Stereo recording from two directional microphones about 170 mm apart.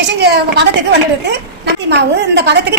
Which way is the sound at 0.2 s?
80° right.